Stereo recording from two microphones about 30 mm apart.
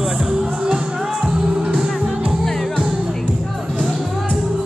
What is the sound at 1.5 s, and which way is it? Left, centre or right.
Music, right.